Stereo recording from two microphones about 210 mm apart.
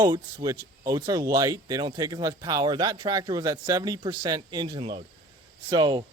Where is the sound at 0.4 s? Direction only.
15° right (ahead or behind).